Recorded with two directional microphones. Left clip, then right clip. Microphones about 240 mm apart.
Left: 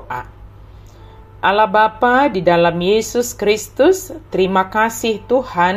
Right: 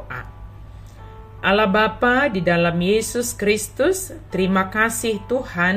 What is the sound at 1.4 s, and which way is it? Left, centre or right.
A woman's voice, centre.